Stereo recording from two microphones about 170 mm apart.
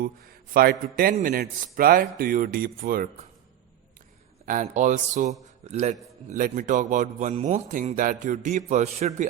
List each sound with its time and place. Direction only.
0.5 s speech: 60° right (ahead or behind)
4.4 s speech: 45° right (ahead or behind)